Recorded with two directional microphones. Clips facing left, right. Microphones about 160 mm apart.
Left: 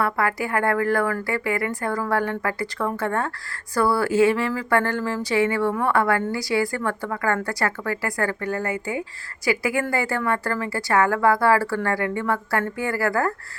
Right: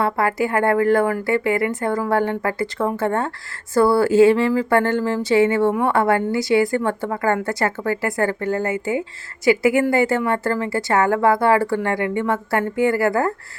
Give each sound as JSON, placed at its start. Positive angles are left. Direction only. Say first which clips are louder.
{"t": 0.0, "sound": "a woman's voice", "louder": "right 4 dB", "side_deg": -25}